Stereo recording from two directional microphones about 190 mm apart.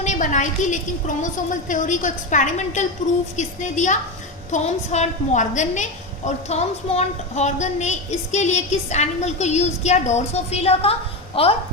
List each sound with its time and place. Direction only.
0.0 s a woman's voice: 40° left (ahead or behind)